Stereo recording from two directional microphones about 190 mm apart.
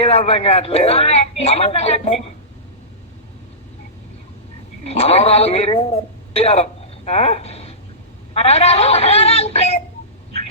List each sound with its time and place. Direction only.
0.0 s speech: 30° left (ahead or behind)
4.9 s speech: 35° left (ahead or behind)